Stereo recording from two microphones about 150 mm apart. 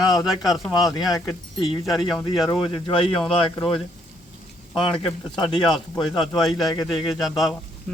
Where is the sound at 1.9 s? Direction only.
Centre (ahead or behind).